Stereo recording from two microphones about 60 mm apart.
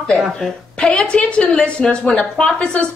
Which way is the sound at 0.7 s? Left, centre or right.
Centre.